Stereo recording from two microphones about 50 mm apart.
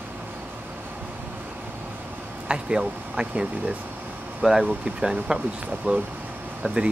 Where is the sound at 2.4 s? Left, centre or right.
Centre.